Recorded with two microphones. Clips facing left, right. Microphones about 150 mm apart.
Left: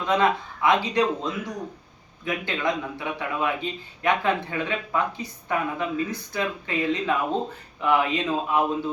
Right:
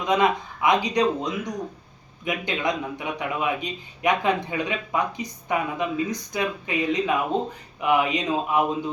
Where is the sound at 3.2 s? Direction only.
15° right (ahead or behind).